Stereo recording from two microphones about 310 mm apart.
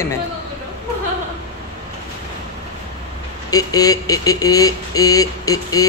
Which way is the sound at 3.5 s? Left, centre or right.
Centre.